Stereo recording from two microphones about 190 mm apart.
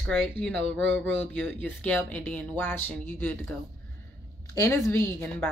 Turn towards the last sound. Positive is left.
turn(degrees=10)  # may be behind; listen again after turning